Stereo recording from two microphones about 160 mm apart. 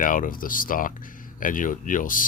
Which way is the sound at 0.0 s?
60° left (ahead or behind).